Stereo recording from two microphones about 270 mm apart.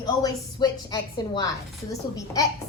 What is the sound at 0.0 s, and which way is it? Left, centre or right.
A woman's voice, centre.